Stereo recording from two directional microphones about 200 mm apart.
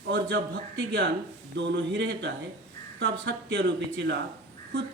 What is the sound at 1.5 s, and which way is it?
Speech, 60° right (ahead or behind).